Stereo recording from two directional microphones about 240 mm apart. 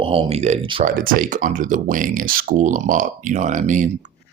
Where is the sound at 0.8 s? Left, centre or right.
Right.